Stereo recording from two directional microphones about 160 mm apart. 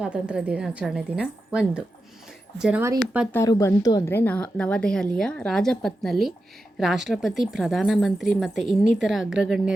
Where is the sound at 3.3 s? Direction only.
15° left (ahead or behind).